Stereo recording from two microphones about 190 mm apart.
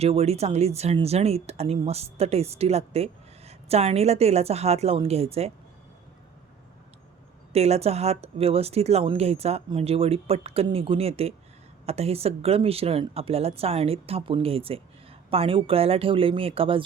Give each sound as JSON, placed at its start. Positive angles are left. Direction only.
{"t": 0.0, "sound": "a woman's voice", "side_deg": -35}
{"t": 7.5, "sound": "a woman's voice", "side_deg": -35}